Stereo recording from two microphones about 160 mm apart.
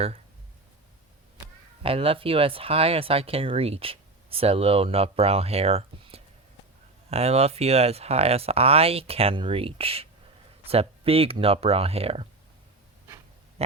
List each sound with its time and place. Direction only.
1.8 s speech: 35° right (ahead or behind)
13.6 s pig: 40° right (ahead or behind)